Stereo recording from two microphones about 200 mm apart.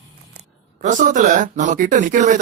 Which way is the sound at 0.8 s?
40° right (ahead or behind).